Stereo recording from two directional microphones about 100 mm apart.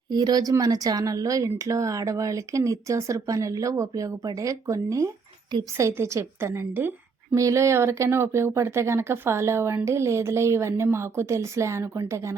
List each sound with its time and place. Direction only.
0.1 s speech: 40° right (ahead or behind); by 6.9 s 20° right (ahead or behind)
7.3 s speech: 30° right (ahead or behind)